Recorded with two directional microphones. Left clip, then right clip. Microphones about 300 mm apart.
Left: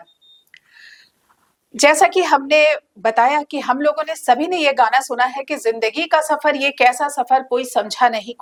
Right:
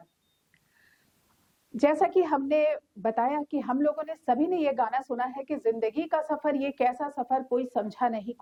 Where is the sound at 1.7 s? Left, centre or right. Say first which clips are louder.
Left 11 dB; centre.